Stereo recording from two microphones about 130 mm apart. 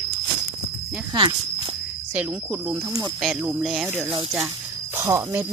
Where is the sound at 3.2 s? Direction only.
5° right (ahead or behind).